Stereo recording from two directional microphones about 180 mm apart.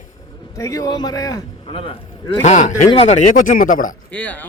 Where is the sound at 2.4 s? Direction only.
40° left (ahead or behind).